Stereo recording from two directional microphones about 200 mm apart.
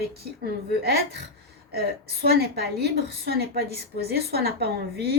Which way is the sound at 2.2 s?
50° right (ahead or behind).